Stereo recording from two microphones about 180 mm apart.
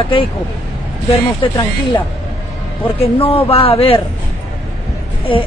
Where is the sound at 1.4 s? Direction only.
25° left (ahead or behind).